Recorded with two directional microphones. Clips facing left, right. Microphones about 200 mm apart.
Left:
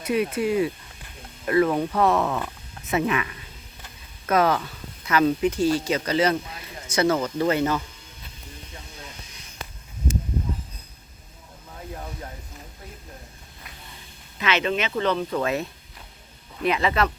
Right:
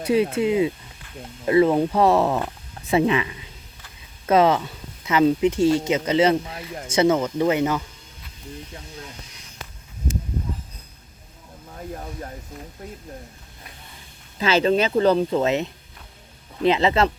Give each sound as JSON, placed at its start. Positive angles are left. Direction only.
{"t": 0.0, "sound": "speech", "side_deg": -30}
{"t": 7.3, "sound": "speech", "side_deg": -15}
{"t": 14.3, "sound": "speech", "side_deg": -30}